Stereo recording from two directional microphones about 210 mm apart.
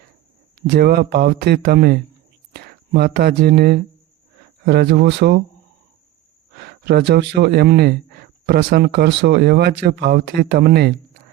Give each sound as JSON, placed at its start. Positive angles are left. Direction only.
{"t": 0.7, "sound": "speech", "side_deg": -50}
{"t": 6.6, "sound": "speech", "side_deg": -50}